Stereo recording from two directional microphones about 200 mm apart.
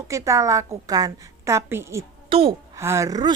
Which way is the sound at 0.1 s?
15° right (ahead or behind).